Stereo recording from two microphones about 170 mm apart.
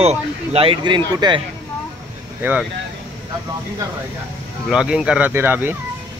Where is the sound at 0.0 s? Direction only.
40° right (ahead or behind).